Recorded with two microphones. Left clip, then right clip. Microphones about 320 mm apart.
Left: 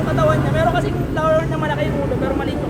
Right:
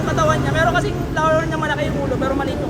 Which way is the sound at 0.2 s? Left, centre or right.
Right.